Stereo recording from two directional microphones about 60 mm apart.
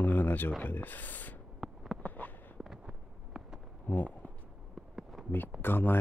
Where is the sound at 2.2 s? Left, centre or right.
Left.